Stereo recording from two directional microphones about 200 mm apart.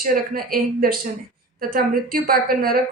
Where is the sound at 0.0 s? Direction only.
45° right (ahead or behind).